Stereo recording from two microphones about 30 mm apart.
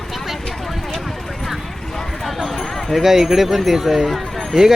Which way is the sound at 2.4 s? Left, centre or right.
Centre.